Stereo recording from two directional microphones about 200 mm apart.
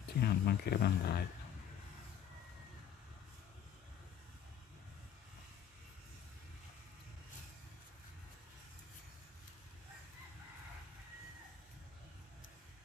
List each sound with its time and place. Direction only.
0.1 s speech: 50° left (ahead or behind)